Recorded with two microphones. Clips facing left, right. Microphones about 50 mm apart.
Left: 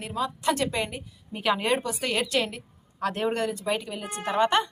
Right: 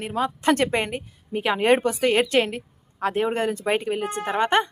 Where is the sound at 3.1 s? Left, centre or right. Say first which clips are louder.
Right 4 dB; centre.